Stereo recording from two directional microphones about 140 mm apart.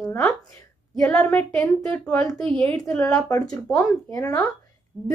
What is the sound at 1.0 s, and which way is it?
A woman's voice, 10° left (ahead or behind).